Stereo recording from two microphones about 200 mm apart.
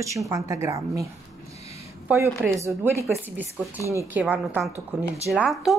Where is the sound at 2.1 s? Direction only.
15° right (ahead or behind).